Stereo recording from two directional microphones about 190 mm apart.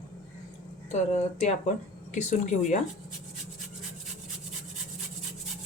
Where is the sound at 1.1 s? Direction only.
35° left (ahead or behind).